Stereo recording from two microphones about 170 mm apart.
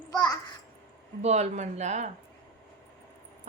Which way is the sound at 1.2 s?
40° right (ahead or behind).